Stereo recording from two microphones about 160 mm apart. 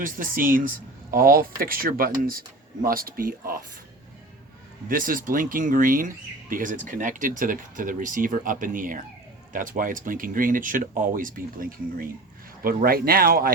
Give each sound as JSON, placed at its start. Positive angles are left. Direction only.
{"t": 0.0, "sound": "speech", "side_deg": -60}
{"t": 4.9, "sound": "speech", "side_deg": -60}